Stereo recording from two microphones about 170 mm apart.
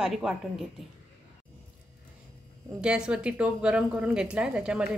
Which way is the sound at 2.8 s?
5° right (ahead or behind).